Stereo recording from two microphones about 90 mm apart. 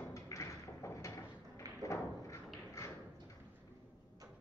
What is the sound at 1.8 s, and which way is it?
Thump, 35° left (ahead or behind).